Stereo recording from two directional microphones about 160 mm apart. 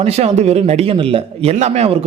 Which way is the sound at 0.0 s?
40° right (ahead or behind).